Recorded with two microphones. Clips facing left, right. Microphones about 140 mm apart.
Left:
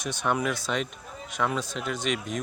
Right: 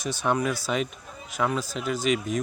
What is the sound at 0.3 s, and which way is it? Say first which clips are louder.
Speech: right 2 dB; centre (ahead or behind).